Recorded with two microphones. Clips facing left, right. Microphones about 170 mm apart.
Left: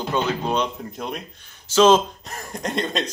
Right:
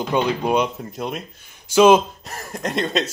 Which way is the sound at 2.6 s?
Centre (ahead or behind).